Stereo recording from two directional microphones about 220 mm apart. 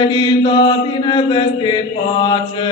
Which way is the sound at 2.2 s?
20° left (ahead or behind).